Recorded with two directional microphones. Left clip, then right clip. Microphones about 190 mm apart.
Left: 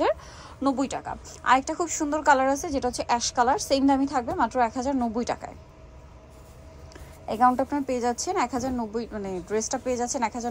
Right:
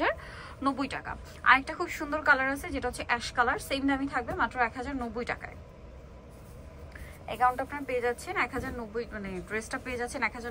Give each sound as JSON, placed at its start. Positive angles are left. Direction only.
{"t": 0.0, "sound": "a woman's voice", "side_deg": 20}
{"t": 7.2, "sound": "a woman's voice", "side_deg": 30}